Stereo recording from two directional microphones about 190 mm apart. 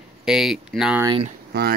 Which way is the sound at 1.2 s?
55° right (ahead or behind).